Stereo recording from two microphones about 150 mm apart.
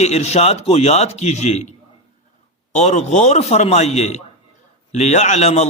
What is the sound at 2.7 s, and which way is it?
A man's voice, 50° left (ahead or behind).